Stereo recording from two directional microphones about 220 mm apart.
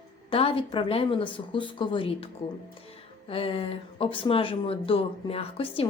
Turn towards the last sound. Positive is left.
turn(degrees=25)  # may be behind; listen again after turning